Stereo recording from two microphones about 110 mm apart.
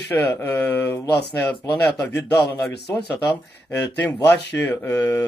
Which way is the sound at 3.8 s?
15° left (ahead or behind).